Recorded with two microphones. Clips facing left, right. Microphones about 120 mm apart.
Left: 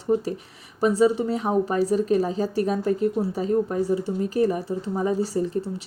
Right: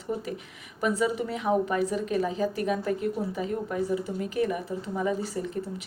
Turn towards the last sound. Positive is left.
turn(degrees=35)  # may be behind; listen again after turning